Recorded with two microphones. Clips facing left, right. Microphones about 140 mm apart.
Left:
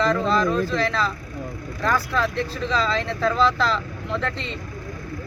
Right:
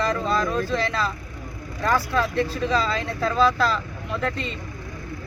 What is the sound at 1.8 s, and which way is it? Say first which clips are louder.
Speech: even; 20° right (ahead or behind).